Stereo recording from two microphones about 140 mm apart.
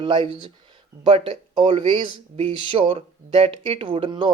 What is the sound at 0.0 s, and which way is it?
Speech, 35° right (ahead or behind).